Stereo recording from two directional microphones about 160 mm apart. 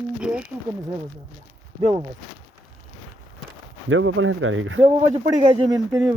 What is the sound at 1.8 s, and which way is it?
Speech, 30° right (ahead or behind).